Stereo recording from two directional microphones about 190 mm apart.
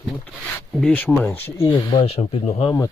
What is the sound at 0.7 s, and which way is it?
Speech, 5° left (ahead or behind).